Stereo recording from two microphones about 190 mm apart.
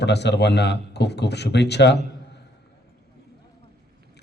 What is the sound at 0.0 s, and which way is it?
A man's voice, 65° left (ahead or behind).